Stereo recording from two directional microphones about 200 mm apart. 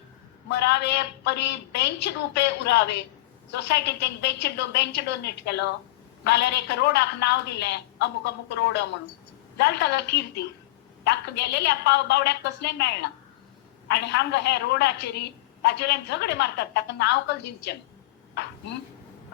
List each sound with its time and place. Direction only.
0.4 s a man's voice: 60° left (ahead or behind)